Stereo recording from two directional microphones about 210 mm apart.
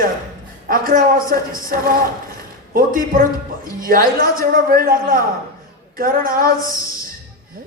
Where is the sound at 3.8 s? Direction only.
40° right (ahead or behind).